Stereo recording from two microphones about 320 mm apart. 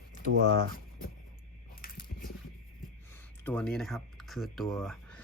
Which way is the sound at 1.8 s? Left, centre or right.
Left.